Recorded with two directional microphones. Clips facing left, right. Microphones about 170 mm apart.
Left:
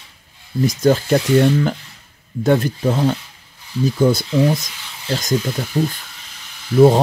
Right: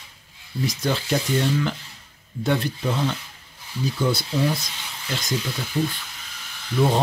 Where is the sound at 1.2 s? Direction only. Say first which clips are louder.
Left 9 dB; 65° left (ahead or behind).